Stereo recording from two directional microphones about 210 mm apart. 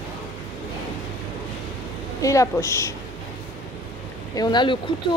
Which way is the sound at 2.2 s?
15° left (ahead or behind).